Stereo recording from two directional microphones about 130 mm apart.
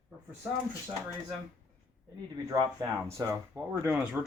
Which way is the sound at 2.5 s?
40° right (ahead or behind).